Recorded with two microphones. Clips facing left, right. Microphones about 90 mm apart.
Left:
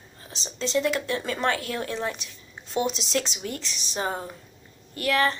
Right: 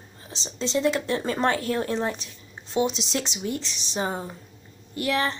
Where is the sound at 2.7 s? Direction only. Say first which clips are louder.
Right 1 dB; 20° right (ahead or behind).